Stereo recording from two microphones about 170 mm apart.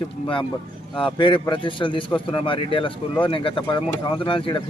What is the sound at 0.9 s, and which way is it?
Speech, 30° left (ahead or behind).